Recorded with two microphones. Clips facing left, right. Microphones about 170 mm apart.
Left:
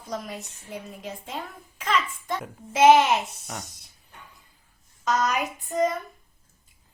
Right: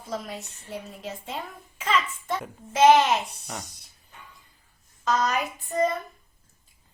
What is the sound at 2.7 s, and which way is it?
Speech, 10° left (ahead or behind).